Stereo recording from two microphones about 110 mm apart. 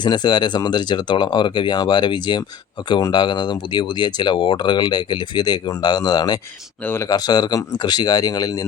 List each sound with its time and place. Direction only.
0.0 s speech: 40° left (ahead or behind)